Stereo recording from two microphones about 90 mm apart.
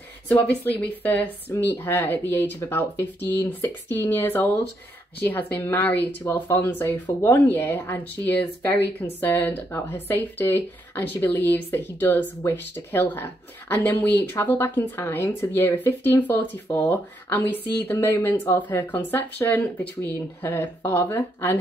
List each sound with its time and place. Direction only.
0.3 s speech: 15° left (ahead or behind)